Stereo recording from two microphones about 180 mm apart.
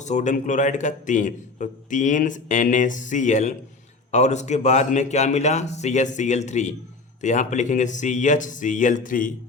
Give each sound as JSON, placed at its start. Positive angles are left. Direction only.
{"t": 0.0, "sound": "a man's voice", "side_deg": 40}